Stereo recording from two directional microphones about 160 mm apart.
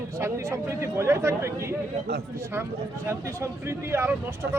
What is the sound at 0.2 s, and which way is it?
Speech, 20° right (ahead or behind).